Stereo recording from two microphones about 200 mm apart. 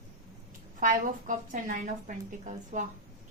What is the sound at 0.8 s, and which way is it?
A woman's voice, 40° right (ahead or behind).